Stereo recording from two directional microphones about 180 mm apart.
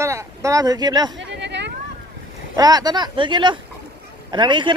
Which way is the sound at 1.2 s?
75° right (ahead or behind).